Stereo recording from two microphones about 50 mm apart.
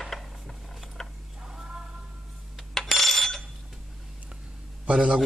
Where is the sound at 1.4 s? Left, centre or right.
Centre.